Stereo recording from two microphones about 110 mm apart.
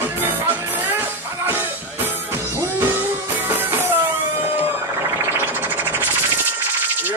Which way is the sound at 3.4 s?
20° right (ahead or behind).